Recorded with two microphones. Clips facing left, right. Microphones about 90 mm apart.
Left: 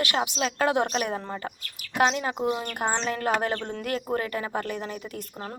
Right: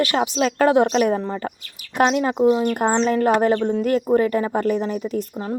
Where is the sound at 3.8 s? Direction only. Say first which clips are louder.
Right 9 dB; 30° right (ahead or behind).